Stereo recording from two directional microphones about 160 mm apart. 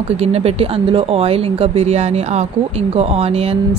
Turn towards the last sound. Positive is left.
turn(degrees=-40)  # may be behind; listen again after turning